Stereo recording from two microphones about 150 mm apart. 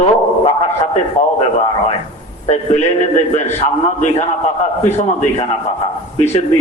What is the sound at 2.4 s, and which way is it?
A man's voice, 45° left (ahead or behind).